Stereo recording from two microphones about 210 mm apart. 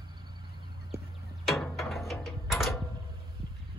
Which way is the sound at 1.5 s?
Centre (ahead or behind).